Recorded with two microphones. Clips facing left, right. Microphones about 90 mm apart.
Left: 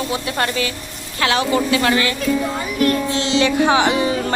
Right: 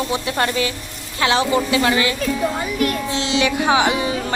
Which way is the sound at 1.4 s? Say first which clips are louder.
Even; 5° right (ahead or behind).